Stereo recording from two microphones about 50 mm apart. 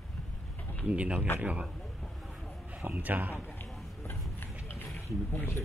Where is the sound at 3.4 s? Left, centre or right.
Left.